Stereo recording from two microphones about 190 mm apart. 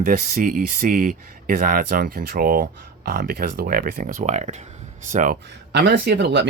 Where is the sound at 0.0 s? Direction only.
45° right (ahead or behind).